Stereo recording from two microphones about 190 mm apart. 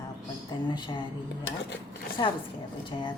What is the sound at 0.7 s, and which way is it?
Speech, 25° left (ahead or behind).